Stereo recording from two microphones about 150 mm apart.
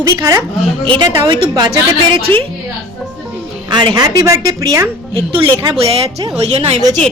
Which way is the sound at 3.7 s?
30° right (ahead or behind).